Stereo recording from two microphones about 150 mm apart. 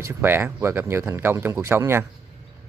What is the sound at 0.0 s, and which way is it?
Speech, 15° right (ahead or behind).